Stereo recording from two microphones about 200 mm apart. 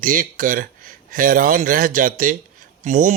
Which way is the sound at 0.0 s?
45° right (ahead or behind).